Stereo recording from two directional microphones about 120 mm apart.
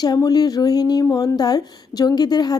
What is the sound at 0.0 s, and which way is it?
Speech, 35° left (ahead or behind).